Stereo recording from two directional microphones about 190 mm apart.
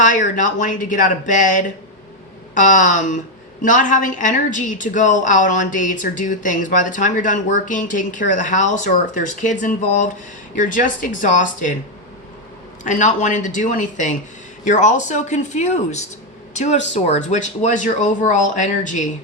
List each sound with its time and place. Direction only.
0.0 s a woman's voice: 40° left (ahead or behind)
12.8 s a woman's voice: 40° left (ahead or behind)